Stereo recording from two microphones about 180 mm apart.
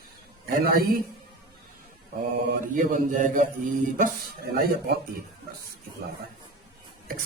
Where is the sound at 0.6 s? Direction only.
55° right (ahead or behind).